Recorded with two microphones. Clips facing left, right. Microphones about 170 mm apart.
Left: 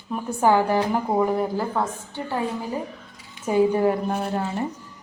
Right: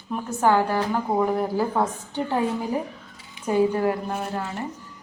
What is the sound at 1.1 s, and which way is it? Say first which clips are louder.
Speech: left 1 dB; centre (ahead or behind).